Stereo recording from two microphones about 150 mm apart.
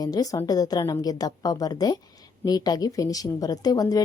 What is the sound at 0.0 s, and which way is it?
A woman's voice, 25° left (ahead or behind).